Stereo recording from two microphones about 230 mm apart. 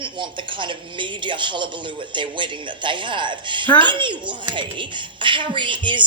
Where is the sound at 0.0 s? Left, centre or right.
Right.